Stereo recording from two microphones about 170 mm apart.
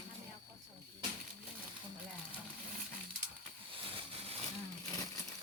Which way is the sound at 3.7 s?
30° right (ahead or behind).